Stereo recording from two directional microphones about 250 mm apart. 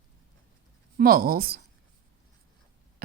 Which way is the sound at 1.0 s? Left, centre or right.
Right.